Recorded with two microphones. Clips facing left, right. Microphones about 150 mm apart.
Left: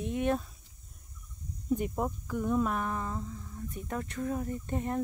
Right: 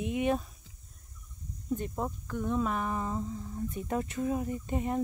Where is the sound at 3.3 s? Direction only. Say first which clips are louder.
Right 5 dB; 25° right (ahead or behind).